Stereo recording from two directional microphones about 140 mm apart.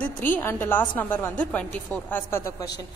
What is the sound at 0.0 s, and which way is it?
A woman's voice, 15° left (ahead or behind).